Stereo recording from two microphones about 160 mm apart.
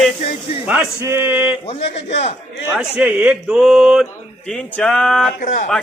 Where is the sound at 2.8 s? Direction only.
10° right (ahead or behind).